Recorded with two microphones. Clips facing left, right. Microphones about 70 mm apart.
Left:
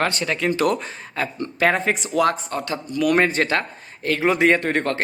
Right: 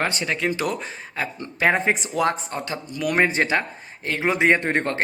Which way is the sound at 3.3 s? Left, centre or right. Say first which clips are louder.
Left 1 dB; centre.